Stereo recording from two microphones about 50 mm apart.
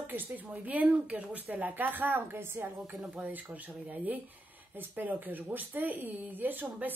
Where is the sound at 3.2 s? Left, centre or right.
Right.